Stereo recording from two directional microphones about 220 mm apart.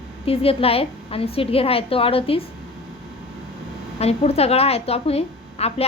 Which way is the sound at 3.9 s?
30° left (ahead or behind).